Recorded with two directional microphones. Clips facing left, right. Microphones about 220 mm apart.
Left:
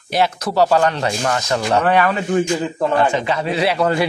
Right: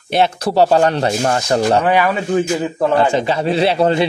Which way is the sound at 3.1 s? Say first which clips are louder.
Right 3 dB; 30° right (ahead or behind).